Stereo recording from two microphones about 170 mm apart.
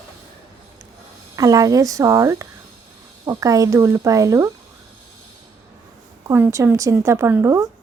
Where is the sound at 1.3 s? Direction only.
20° right (ahead or behind).